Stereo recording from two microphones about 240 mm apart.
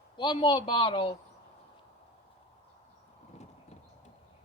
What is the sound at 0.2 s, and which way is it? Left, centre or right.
Speech, centre.